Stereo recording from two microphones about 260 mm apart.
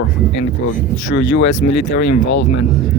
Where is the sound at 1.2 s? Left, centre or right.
Left.